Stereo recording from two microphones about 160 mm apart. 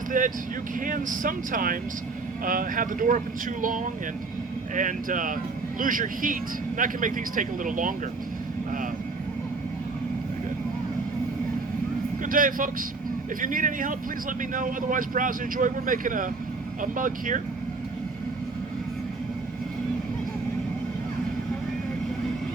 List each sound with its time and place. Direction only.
0.1 s speech: 55° right (ahead or behind)
4.7 s speech: 55° right (ahead or behind)
12.2 s speech: 60° right (ahead or behind)